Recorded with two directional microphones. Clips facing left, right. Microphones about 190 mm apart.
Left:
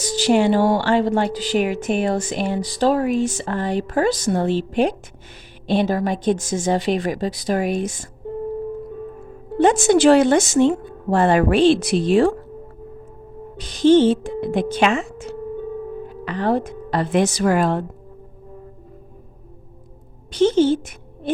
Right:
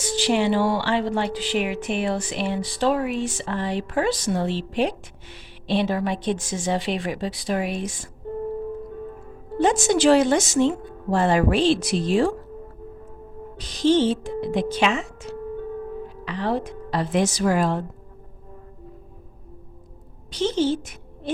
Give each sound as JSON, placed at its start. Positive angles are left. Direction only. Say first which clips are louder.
{"t": 0.0, "sound": "speech", "louder": "left 4 dB", "side_deg": 40}
{"t": 9.6, "sound": "a woman's voice", "louder": "left 5 dB", "side_deg": 55}
{"t": 13.6, "sound": "a woman's voice", "louder": "left 6 dB", "side_deg": 55}
{"t": 20.3, "sound": "speech", "louder": "left 6 dB", "side_deg": 50}